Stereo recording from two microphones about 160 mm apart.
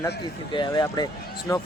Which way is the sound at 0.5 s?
25° left (ahead or behind).